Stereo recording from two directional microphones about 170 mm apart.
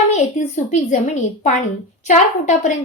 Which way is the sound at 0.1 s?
45° left (ahead or behind).